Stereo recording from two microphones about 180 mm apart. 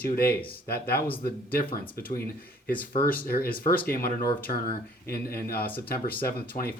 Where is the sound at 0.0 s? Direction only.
60° left (ahead or behind).